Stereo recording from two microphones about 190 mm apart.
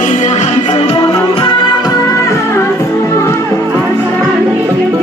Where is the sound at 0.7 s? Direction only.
25° left (ahead or behind).